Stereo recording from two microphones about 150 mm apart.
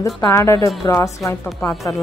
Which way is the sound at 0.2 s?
20° left (ahead or behind).